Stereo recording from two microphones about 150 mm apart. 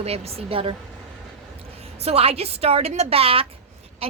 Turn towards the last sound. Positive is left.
turn(degrees=-40)  # may be behind; listen again after turning